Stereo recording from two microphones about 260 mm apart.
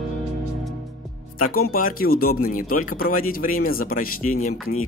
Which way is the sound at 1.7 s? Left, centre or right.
Left.